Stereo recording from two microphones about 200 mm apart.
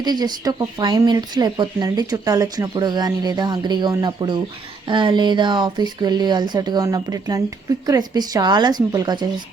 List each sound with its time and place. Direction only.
0.0 s speech: 20° right (ahead or behind)